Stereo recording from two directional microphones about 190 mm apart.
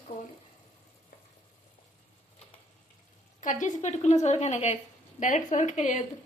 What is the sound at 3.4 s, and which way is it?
A woman's voice, 40° left (ahead or behind).